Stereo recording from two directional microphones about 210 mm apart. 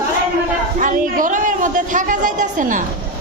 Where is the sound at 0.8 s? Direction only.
40° right (ahead or behind).